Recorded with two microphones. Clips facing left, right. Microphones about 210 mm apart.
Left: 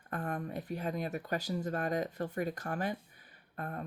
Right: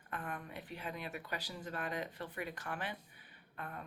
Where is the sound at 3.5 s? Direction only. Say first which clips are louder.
Left 6 dB; 40° left (ahead or behind).